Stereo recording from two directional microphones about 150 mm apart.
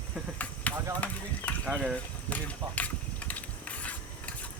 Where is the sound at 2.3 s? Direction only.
10° left (ahead or behind).